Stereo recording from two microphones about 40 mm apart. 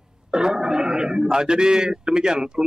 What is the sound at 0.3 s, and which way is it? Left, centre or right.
A man's voice, centre.